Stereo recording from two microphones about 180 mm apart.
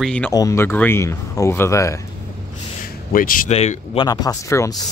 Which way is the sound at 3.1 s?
50° left (ahead or behind).